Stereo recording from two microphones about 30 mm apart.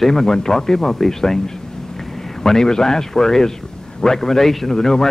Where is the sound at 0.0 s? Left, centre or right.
Centre.